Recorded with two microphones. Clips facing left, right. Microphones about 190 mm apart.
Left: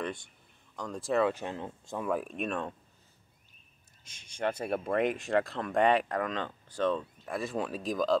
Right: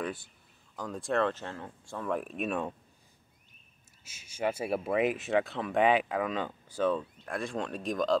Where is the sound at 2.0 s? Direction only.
Centre (ahead or behind).